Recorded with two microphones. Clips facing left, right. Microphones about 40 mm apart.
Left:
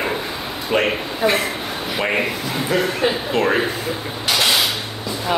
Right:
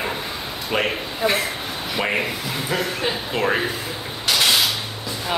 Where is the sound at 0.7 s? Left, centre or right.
Centre.